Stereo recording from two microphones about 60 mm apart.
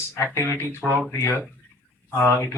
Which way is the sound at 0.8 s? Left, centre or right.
Centre.